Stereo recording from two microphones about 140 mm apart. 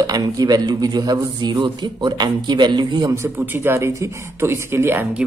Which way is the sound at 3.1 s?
20° right (ahead or behind).